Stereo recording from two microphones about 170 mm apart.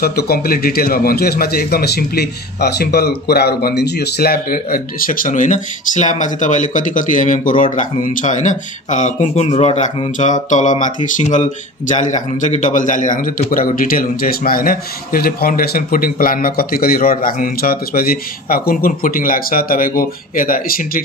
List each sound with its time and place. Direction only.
0.0 s a man's voice: 65° left (ahead or behind)